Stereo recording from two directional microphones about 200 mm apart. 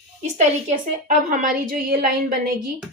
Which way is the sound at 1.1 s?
40° right (ahead or behind).